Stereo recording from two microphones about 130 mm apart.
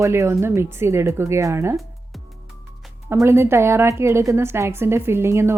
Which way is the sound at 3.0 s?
20° right (ahead or behind).